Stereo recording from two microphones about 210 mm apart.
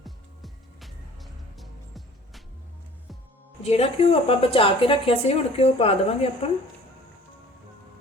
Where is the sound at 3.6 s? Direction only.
30° left (ahead or behind).